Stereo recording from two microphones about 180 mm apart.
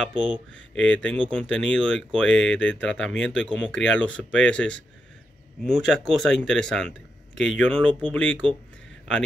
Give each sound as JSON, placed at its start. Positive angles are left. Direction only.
{"t": 0.7, "sound": "speech", "side_deg": 5}